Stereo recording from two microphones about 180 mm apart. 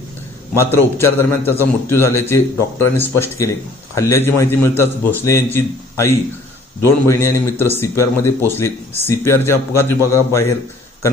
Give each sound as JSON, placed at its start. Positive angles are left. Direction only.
{"t": 0.5, "sound": "a man's voice", "side_deg": 15}